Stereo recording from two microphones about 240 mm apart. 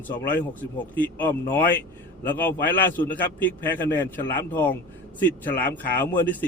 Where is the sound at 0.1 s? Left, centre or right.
Centre.